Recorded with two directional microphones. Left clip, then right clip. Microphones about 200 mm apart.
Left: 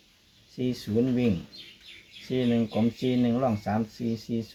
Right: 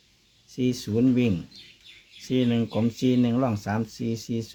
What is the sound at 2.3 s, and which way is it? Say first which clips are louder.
Speech: right 2 dB; 60° right (ahead or behind).